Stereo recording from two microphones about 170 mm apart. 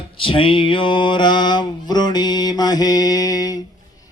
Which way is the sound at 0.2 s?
30° left (ahead or behind).